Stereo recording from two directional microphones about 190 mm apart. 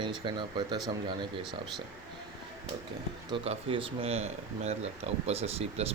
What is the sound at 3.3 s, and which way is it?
Speech, 30° right (ahead or behind).